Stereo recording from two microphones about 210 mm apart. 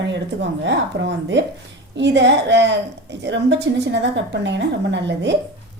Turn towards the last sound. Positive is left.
turn(degrees=-55)  # may be behind; listen again after turning